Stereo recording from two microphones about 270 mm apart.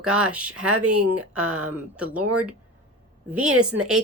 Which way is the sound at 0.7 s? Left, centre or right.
Right.